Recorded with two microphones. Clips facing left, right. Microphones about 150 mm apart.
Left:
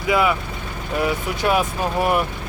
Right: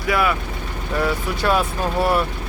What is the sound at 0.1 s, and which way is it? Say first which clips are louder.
Speech: left 1 dB; 20° left (ahead or behind).